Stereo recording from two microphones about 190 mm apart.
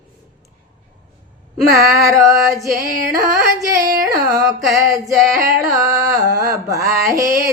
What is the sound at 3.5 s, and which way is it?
Music, 20° right (ahead or behind).